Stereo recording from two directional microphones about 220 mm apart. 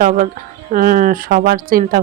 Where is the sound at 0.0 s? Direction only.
35° right (ahead or behind).